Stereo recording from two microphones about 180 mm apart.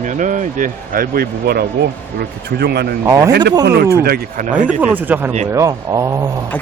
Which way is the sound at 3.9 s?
60° right (ahead or behind).